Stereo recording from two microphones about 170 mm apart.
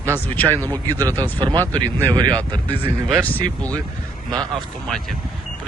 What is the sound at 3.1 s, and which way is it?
Speech, 10° left (ahead or behind).